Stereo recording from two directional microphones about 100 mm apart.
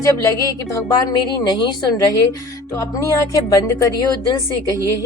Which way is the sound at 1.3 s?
50° left (ahead or behind).